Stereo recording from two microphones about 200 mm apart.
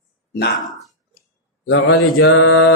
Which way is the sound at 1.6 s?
70° left (ahead or behind).